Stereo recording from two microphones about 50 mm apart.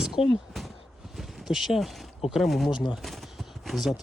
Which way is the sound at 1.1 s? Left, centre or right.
Centre.